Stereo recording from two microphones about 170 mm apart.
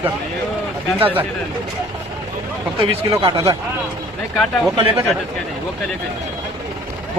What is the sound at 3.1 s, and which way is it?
Speech, 25° right (ahead or behind).